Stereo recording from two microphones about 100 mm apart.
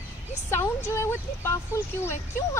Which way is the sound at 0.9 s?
30° left (ahead or behind).